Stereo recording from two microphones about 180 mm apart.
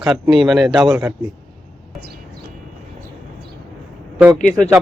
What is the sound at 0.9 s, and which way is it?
Speech, 15° right (ahead or behind).